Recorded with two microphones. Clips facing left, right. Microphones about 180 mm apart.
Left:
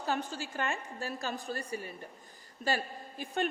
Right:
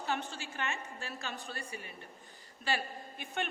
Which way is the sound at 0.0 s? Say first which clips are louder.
Left 3 dB; 40° left (ahead or behind).